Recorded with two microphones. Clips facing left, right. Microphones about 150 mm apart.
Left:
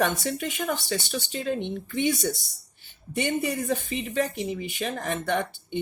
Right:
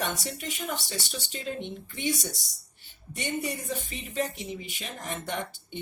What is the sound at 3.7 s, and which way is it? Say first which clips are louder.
Speech: left 7 dB; 60° left (ahead or behind).